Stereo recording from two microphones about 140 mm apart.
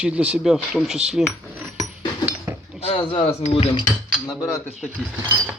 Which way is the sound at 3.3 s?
45° left (ahead or behind).